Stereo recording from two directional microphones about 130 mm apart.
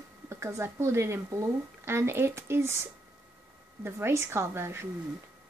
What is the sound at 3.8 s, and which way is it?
A woman's voice, 20° right (ahead or behind).